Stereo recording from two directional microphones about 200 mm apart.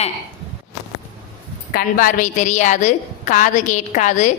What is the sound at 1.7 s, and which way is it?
A woman's voice, 45° left (ahead or behind).